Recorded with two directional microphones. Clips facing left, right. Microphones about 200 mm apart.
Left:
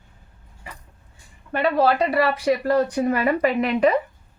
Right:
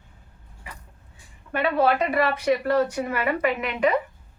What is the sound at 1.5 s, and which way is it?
Speech, 35° left (ahead or behind).